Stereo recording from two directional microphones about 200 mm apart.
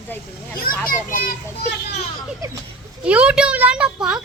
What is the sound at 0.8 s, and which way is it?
Speech, 45° left (ahead or behind).